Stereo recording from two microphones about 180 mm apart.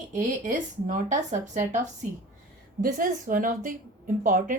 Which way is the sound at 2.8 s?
50° right (ahead or behind).